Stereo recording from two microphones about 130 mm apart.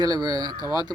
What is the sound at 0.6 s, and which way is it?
Speech, 35° left (ahead or behind).